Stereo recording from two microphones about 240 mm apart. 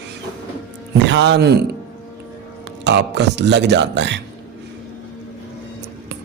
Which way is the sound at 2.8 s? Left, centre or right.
Right.